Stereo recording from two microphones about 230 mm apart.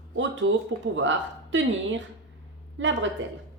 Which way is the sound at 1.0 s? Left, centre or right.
Right.